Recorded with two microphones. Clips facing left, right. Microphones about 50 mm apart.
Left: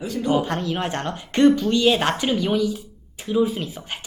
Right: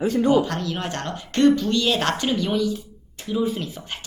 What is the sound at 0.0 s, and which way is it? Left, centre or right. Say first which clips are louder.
Speech: right 6 dB; right.